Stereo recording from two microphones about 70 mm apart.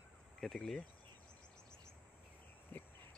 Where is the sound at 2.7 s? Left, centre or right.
Left.